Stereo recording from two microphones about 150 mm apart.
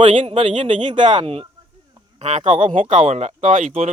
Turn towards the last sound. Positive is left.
turn(degrees=-55)  # may be behind; listen again after turning